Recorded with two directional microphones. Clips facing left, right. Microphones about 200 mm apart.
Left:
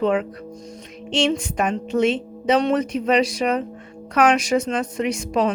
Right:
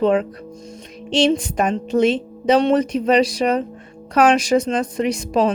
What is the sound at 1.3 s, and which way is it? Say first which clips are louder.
A woman's voice: right 3 dB; 35° right (ahead or behind).